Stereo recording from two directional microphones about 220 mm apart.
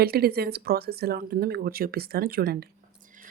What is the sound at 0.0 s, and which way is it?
Speech, 45° right (ahead or behind).